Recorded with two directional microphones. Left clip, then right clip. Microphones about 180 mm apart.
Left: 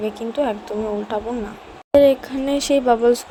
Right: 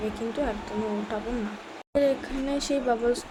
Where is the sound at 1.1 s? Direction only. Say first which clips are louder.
Left 7 dB; 30° left (ahead or behind).